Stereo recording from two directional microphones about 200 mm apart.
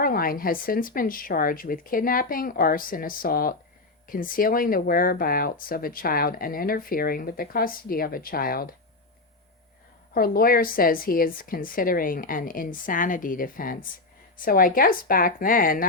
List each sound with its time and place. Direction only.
0.0 s speech: 45° left (ahead or behind)
10.2 s speech: 45° left (ahead or behind)